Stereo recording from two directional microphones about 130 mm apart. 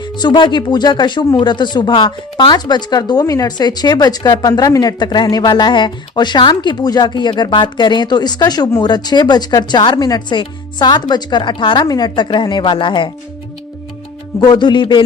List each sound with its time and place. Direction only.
0.0 s speech: 35° left (ahead or behind)
14.4 s speech: 35° left (ahead or behind)